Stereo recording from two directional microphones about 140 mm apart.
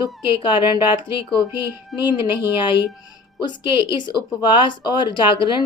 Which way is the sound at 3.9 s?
35° left (ahead or behind).